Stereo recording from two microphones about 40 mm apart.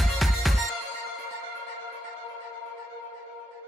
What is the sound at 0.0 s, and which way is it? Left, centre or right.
Music, centre.